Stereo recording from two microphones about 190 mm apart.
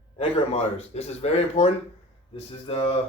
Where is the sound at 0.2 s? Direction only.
30° left (ahead or behind).